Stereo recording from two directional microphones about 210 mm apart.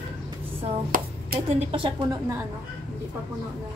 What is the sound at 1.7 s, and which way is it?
Speech, 25° right (ahead or behind).